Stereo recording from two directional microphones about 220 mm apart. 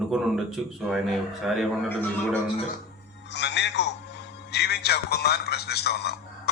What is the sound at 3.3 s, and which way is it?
A man's voice, 50° left (ahead or behind).